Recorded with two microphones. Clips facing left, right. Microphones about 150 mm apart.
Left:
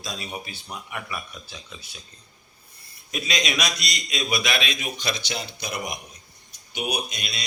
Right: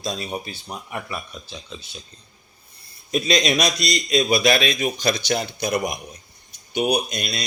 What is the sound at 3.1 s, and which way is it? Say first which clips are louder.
A man's voice: right 8 dB; 35° right (ahead or behind).